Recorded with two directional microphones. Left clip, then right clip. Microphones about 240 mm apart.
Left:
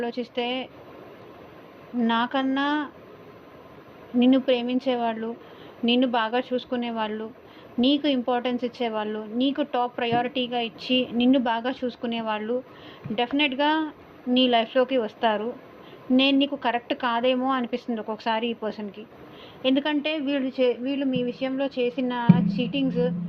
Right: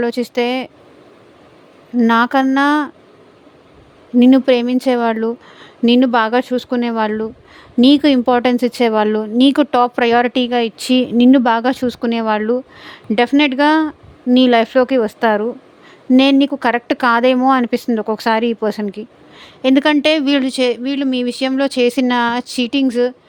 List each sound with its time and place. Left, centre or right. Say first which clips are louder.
0.0 s a woman's voice: right 11 dB; right
2.0 s speech: right 11 dB; right
4.2 s a woman's voice: right 10 dB; right